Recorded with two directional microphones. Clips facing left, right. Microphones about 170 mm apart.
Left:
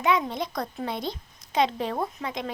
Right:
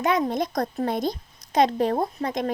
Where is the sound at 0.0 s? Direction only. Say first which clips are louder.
Right 3 dB; 40° right (ahead or behind).